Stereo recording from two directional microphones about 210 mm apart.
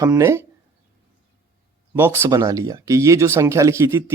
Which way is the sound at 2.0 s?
10° right (ahead or behind).